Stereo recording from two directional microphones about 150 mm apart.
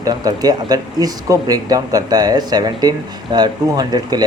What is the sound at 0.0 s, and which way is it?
Speech, 25° right (ahead or behind).